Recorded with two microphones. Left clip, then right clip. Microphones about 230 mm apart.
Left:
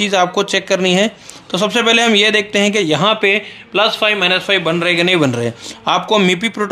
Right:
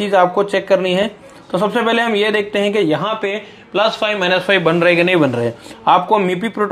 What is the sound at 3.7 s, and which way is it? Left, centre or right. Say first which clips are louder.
Speech: left 2 dB; centre.